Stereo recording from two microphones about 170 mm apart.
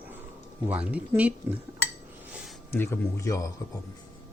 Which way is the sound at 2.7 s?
15° left (ahead or behind).